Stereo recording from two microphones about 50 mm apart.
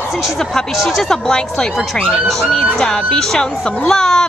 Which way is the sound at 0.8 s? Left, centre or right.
Centre.